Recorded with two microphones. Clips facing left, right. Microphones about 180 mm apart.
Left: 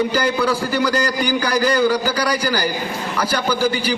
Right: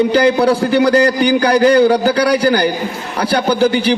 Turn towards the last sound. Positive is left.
turn(degrees=-65)  # may be behind; listen again after turning